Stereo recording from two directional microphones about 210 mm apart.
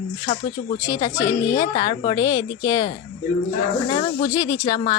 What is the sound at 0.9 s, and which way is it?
A woman's voice, 15° left (ahead or behind).